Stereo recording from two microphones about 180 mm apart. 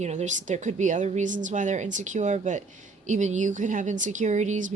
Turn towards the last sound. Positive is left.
turn(degrees=-45)  # may be behind; listen again after turning